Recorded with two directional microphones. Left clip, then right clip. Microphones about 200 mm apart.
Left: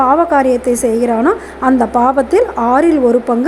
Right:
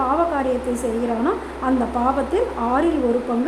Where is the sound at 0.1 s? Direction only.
30° left (ahead or behind).